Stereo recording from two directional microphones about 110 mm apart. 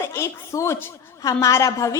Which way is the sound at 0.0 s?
25° left (ahead or behind).